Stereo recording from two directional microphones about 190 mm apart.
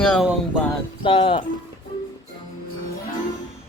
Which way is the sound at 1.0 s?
30° left (ahead or behind).